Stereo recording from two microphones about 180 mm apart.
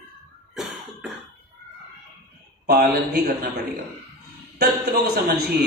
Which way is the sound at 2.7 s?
65° right (ahead or behind).